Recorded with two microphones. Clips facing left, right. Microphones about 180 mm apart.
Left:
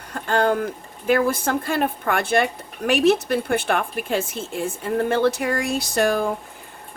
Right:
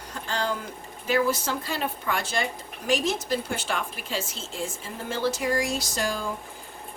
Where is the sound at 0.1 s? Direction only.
55° left (ahead or behind).